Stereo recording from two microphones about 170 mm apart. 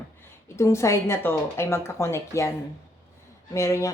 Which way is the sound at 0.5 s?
15° left (ahead or behind).